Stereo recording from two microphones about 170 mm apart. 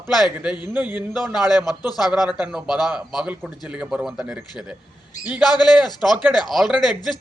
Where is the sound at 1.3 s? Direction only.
25° left (ahead or behind).